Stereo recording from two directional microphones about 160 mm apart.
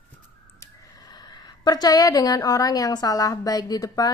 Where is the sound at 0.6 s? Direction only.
25° left (ahead or behind).